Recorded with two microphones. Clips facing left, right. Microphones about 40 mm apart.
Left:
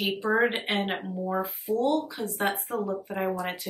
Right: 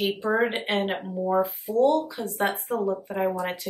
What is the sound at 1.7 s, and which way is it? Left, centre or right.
Speech, right.